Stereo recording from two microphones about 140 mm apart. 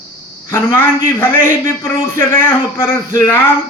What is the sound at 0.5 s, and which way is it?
A man's voice, 15° left (ahead or behind).